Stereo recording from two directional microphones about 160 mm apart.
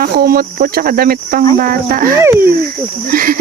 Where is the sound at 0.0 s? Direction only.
65° right (ahead or behind).